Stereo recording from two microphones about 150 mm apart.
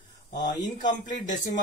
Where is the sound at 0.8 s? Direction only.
25° left (ahead or behind).